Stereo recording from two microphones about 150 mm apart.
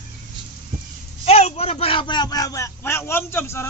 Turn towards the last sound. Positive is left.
turn(degrees=15)  # may be behind; listen again after turning